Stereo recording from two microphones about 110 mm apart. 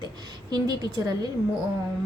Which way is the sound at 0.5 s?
40° right (ahead or behind).